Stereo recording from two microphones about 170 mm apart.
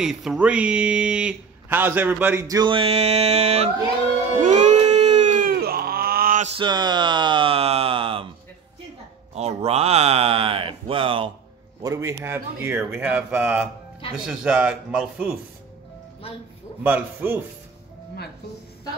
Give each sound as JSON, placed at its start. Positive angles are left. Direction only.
{"t": 0.0, "sound": "speech", "side_deg": -5}
{"t": 4.4, "sound": "a sound", "side_deg": -45}
{"t": 6.5, "sound": "speech", "side_deg": -25}
{"t": 9.3, "sound": "a sound", "side_deg": -40}
{"t": 11.8, "sound": "speech", "side_deg": -15}
{"t": 16.8, "sound": "speech", "side_deg": -10}